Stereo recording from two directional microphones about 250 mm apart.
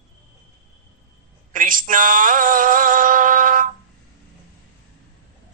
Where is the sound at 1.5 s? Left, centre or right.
Right.